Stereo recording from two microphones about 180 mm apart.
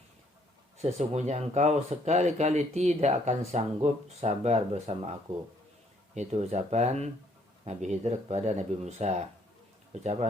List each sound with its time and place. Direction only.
0.8 s speech: 40° right (ahead or behind)
6.1 s speech: 35° right (ahead or behind)